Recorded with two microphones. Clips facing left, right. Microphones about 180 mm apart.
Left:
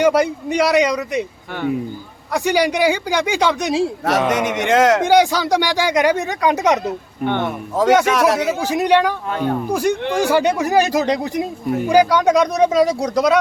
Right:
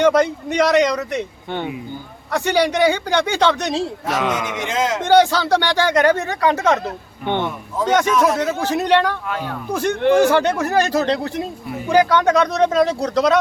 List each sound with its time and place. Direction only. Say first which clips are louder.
0.0 s speech: even; 10° left (ahead or behind)
2.3 s speech: left 1 dB; 10° left (ahead or behind)
4.3 s speech: left 6 dB; 70° left (ahead or behind)
5.0 s speech: even; 10° left (ahead or behind)
8.0 s speech: left 1 dB; 75° left (ahead or behind)
8.4 s speech: left 1 dB; 10° left (ahead or behind)